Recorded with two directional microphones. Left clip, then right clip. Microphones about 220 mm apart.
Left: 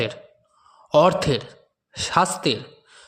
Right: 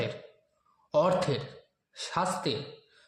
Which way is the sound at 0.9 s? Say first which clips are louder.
Left 9 dB; 40° left (ahead or behind).